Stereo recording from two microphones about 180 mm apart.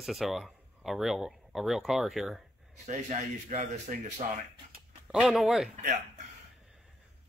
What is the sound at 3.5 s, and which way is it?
Speech, 45° right (ahead or behind).